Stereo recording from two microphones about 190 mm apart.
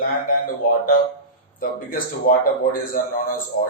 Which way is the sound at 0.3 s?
50° left (ahead or behind).